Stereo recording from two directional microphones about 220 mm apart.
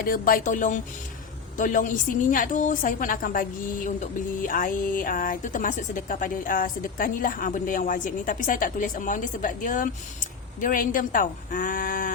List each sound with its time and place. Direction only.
0.0 s a woman's voice: 40° left (ahead or behind)